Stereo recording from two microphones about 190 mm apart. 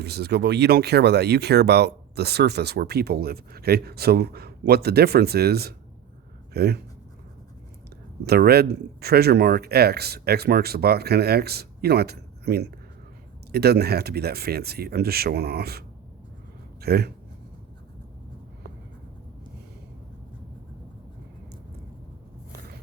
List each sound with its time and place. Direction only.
0.0 s speech: 60° right (ahead or behind)
8.2 s speech: 55° right (ahead or behind)
16.8 s speech: 55° right (ahead or behind)